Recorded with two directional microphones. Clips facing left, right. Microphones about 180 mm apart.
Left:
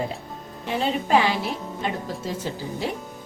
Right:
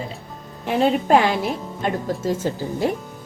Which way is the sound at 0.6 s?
55° right (ahead or behind).